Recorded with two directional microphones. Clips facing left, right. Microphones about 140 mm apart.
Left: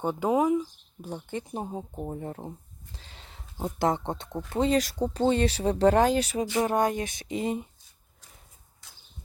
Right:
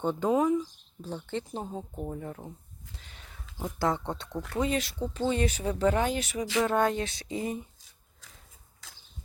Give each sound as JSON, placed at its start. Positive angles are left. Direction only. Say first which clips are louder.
{"t": 0.0, "sound": "speech", "louder": "left 1 dB", "side_deg": 10}
{"t": 2.0, "sound": "speech", "louder": "left 2 dB", "side_deg": 35}
{"t": 2.9, "sound": "a sound", "louder": "left 3 dB", "side_deg": 30}
{"t": 3.8, "sound": "speech", "louder": "left 2 dB", "side_deg": 20}
{"t": 4.8, "sound": "speech", "louder": "left 5 dB", "side_deg": 40}
{"t": 6.7, "sound": "speech", "louder": "left 1 dB", "side_deg": 15}
{"t": 8.8, "sound": "a sound", "louder": "right 3 dB", "side_deg": -90}